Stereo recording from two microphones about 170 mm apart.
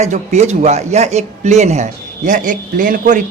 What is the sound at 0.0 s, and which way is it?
A woman's voice, 40° right (ahead or behind).